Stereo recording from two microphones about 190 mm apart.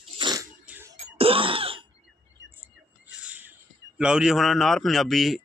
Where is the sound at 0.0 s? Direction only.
25° right (ahead or behind).